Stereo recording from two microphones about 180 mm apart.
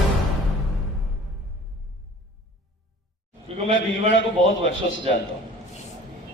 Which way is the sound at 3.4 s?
35° right (ahead or behind).